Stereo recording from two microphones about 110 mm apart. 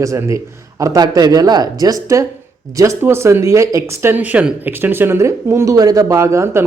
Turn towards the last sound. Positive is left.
turn(degrees=-25)  # may be behind; listen again after turning